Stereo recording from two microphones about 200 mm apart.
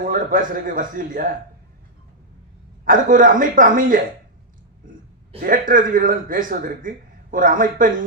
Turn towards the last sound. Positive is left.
turn(degrees=-40)  # may be behind; listen again after turning